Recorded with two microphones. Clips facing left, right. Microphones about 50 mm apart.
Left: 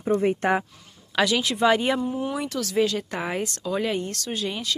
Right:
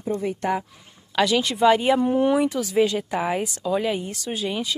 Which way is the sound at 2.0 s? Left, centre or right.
Right.